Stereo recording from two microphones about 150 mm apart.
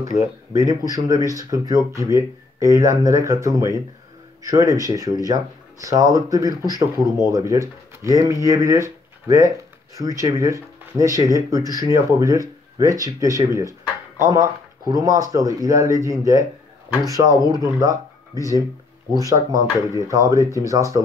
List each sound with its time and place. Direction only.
0.6 s speech: 20° right (ahead or behind)